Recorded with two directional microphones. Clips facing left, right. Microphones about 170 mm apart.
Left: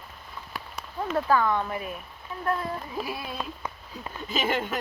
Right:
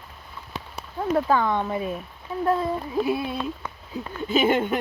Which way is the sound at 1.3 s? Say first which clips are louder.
Right 2 dB; 20° right (ahead or behind).